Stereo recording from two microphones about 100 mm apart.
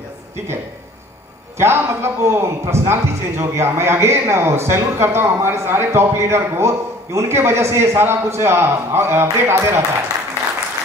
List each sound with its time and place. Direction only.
1.6 s a man's voice: 25° right (ahead or behind)